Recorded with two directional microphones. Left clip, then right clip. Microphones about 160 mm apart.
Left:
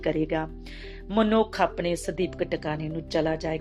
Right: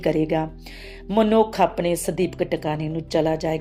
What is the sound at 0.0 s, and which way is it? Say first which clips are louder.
Speech: right 5 dB; 45° right (ahead or behind).